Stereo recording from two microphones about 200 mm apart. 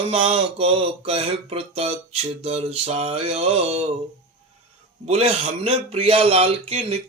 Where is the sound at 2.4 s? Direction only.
30° right (ahead or behind).